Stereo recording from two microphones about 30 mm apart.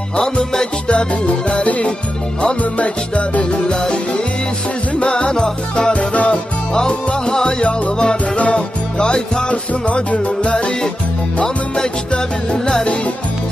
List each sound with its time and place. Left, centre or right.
0.2 s music: left
0.8 s music: left
2.6 s music: left
3.6 s music: left
5.0 s music: left
5.9 s music: left
6.3 s music: left
8.5 s music: left
11.4 s music: left